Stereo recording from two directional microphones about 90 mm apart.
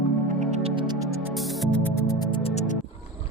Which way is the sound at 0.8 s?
50° right (ahead or behind).